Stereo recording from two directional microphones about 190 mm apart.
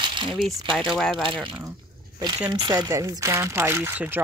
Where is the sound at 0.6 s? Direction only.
25° right (ahead or behind).